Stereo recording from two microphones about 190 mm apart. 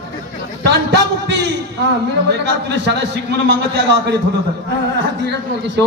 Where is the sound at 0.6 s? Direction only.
65° right (ahead or behind).